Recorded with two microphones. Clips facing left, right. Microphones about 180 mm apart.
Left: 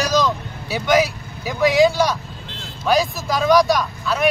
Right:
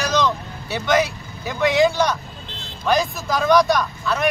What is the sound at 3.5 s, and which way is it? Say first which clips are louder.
Speech: left 1 dB; 5° left (ahead or behind).